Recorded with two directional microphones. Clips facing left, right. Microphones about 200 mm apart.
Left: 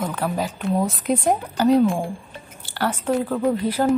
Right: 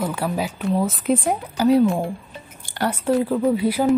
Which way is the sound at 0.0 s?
10° right (ahead or behind).